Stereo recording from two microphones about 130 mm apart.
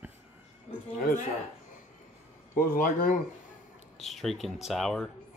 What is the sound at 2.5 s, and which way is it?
Speech, 90° left.